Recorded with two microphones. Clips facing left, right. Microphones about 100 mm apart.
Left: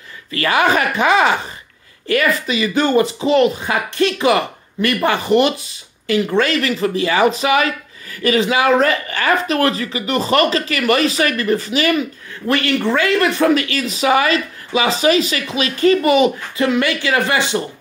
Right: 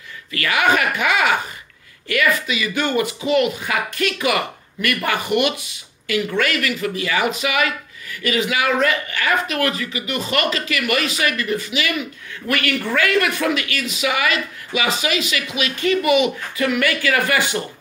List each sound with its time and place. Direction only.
0.3 s speech: 35° left (ahead or behind)